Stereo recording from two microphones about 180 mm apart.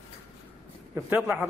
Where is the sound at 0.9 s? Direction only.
15° right (ahead or behind).